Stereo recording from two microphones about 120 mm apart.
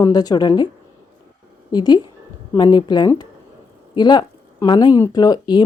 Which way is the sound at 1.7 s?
35° left (ahead or behind).